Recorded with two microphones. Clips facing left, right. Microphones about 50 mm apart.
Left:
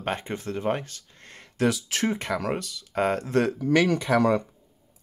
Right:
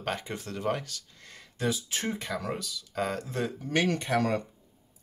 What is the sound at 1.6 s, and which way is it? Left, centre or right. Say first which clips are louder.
Speech: left 6 dB; left.